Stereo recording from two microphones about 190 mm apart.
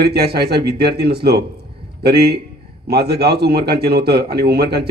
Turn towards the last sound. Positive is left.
turn(degrees=-55)  # may be behind; listen again after turning